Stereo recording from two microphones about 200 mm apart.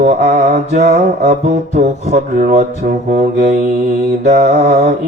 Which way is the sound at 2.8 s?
45° right (ahead or behind).